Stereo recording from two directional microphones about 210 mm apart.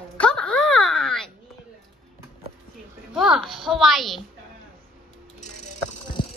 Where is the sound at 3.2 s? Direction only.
Centre (ahead or behind).